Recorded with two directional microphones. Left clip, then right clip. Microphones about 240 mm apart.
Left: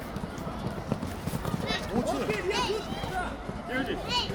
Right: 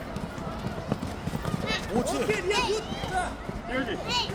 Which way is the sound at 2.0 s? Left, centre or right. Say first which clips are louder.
Right 2 dB; right.